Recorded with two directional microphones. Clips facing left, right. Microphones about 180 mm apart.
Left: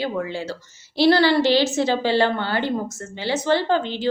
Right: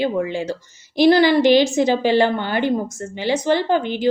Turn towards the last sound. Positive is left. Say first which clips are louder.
# right 2 dB
turn(degrees=-15)  # may be behind; listen again after turning